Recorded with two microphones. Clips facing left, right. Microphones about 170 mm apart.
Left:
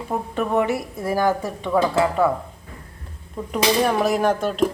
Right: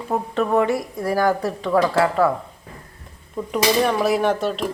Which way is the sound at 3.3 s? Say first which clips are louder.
Right 1 dB; centre (ahead or behind).